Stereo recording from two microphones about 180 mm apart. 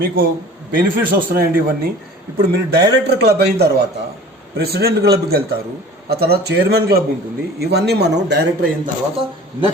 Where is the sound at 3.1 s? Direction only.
65° right (ahead or behind).